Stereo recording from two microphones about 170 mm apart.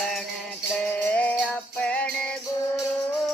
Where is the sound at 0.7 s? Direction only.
10° left (ahead or behind).